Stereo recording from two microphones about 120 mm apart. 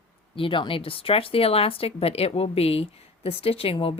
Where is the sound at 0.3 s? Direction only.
45° left (ahead or behind).